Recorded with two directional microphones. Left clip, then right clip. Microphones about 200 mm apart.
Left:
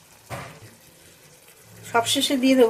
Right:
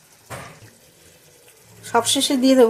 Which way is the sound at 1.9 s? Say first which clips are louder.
Right 2 dB; 30° right (ahead or behind).